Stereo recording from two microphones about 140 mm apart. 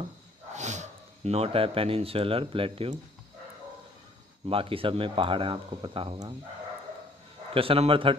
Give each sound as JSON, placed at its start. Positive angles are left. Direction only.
{"t": 0.5, "sound": "speech", "side_deg": -55}
{"t": 4.5, "sound": "speech", "side_deg": -40}
{"t": 7.5, "sound": "speech", "side_deg": -40}